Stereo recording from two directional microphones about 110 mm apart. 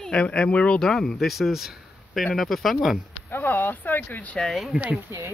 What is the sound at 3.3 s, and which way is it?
Speech, 20° left (ahead or behind).